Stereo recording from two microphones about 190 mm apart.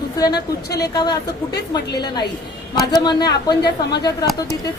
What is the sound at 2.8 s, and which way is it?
Speech, 20° left (ahead or behind).